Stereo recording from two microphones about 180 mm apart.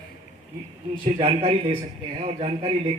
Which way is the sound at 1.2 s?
30° right (ahead or behind).